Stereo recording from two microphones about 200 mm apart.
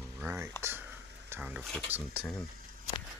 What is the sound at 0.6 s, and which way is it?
Sniff, 10° right (ahead or behind).